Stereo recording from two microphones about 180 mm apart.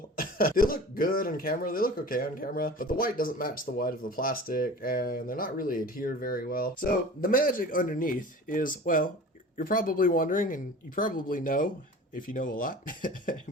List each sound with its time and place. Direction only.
0.2 s speech: 50° left (ahead or behind)